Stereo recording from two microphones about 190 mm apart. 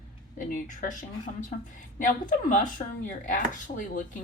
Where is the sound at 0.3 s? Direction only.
45° left (ahead or behind).